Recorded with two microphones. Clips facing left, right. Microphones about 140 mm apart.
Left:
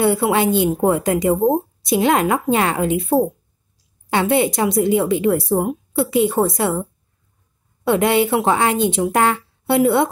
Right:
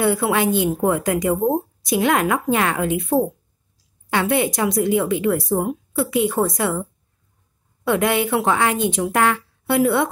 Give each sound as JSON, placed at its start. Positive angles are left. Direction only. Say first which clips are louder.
{"t": 0.0, "sound": "a woman's voice", "louder": "left 2 dB", "side_deg": 25}
{"t": 4.1, "sound": "a woman's voice", "louder": "left 3 dB", "side_deg": 25}
{"t": 7.8, "sound": "a woman's voice", "louder": "left 3 dB", "side_deg": 25}